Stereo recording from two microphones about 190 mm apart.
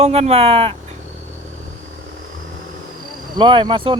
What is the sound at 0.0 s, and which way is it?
Speech, 35° right (ahead or behind).